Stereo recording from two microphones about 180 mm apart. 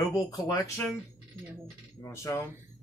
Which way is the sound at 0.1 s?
20° left (ahead or behind).